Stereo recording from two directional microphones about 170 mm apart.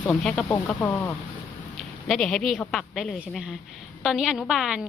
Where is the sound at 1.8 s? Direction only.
Centre (ahead or behind).